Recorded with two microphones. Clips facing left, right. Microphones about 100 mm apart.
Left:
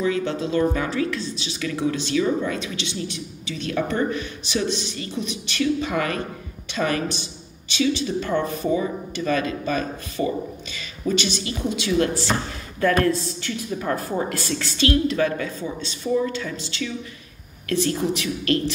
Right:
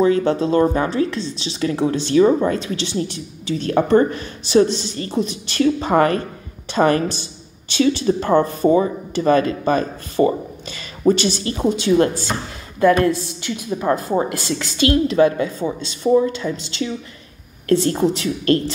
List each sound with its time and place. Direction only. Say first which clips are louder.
0.0 s speech: right 7 dB; 35° right (ahead or behind)
12.8 s a woman's voice: right 5 dB; 20° right (ahead or behind)